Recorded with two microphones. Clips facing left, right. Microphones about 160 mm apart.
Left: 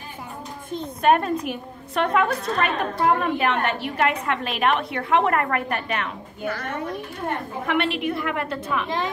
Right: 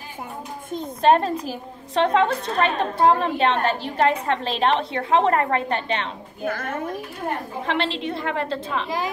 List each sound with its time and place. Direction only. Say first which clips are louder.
1.0 s a woman's voice: right 1 dB; 30° right (ahead or behind)
6.4 s speech: right 1 dB; 50° right (ahead or behind)
7.6 s a woman's voice: left 2 dB; 25° right (ahead or behind)
8.8 s a woman's voice: even; 5° right (ahead or behind)